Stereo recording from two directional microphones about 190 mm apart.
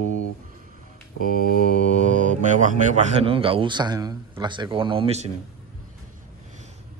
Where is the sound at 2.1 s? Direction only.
40° right (ahead or behind).